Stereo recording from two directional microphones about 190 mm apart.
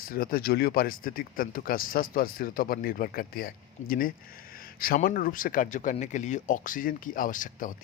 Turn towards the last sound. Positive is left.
turn(degrees=45)  # may be behind; listen again after turning